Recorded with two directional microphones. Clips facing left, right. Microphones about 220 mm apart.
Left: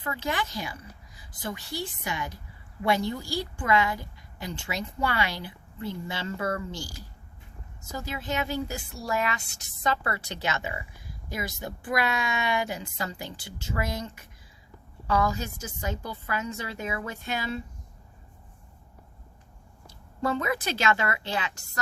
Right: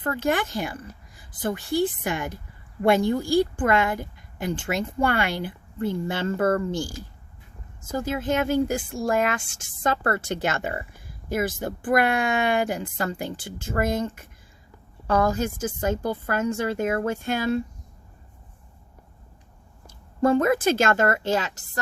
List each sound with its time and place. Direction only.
0.0 s speech: 50° right (ahead or behind)
20.2 s speech: 50° right (ahead or behind)